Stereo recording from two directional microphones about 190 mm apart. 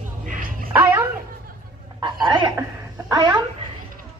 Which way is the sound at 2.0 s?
25° right (ahead or behind).